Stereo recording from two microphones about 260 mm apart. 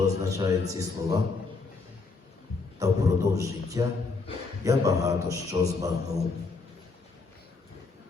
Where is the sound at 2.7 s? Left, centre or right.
Centre.